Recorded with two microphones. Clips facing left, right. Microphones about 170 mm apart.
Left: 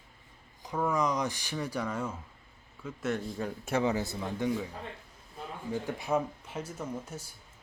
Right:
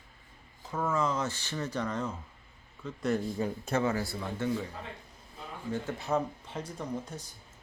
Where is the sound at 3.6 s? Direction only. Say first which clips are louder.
Left 2 dB; 15° left (ahead or behind).